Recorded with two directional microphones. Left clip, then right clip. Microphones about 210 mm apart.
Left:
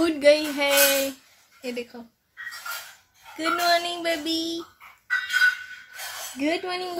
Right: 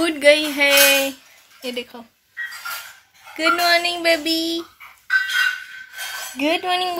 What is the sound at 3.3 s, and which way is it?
Speech, 15° right (ahead or behind).